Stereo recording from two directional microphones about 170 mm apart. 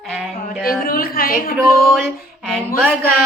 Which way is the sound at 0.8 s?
60° left (ahead or behind).